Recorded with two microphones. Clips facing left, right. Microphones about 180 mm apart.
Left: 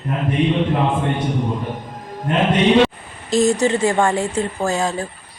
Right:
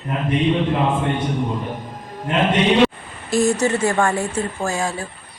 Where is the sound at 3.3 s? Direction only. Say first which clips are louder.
Left 2 dB; 20° left (ahead or behind).